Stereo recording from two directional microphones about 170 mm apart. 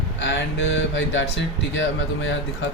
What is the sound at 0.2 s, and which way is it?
Speech, 90° left.